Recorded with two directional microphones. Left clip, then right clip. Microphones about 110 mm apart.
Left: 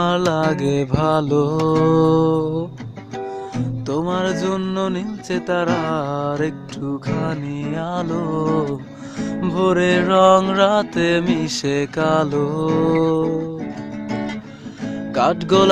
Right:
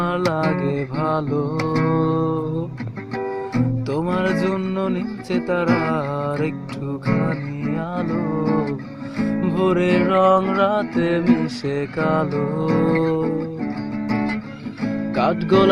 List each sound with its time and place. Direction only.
0.0 s music: 65° left (ahead or behind)
3.8 s music: 35° left (ahead or behind)
9.6 s music: 50° left (ahead or behind)
10.4 s music: 70° left (ahead or behind)
12.6 s music: centre (ahead or behind)
13.0 s music: 40° left (ahead or behind)
14.1 s music: centre (ahead or behind)
15.1 s music: 55° left (ahead or behind)